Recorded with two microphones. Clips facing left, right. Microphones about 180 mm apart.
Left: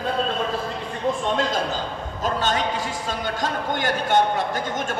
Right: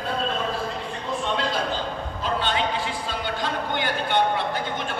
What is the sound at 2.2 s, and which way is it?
A man's voice, 45° left (ahead or behind).